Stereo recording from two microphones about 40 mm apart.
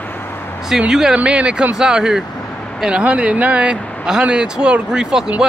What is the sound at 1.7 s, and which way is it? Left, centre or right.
Speech, centre.